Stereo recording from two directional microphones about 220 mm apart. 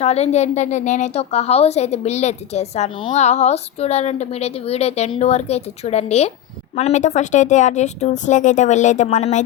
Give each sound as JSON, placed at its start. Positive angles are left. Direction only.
{"t": 0.0, "sound": "a woman's voice", "side_deg": 30}